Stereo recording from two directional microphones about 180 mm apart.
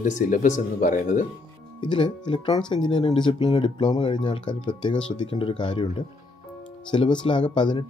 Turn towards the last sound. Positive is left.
turn(degrees=25)  # may be behind; listen again after turning